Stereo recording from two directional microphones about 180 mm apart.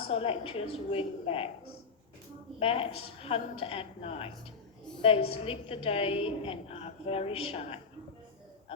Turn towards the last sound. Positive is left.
turn(degrees=35)  # may be behind; listen again after turning